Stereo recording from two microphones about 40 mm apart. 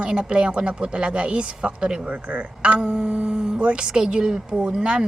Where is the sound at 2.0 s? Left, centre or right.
Right.